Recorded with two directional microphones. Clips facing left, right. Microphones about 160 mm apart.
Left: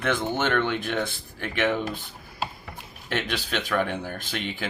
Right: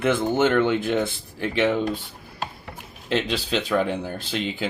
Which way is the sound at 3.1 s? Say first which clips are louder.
Right 4 dB; 25° right (ahead or behind).